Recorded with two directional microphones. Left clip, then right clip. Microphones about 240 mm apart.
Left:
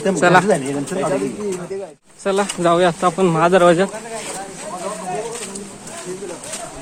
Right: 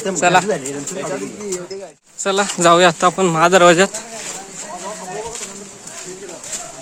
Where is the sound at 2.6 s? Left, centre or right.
Right.